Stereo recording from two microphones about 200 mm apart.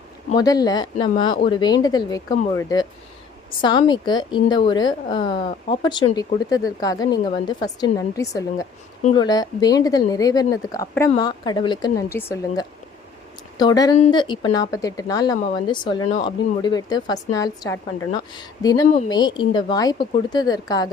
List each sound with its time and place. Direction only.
0.3 s speech: 20° left (ahead or behind)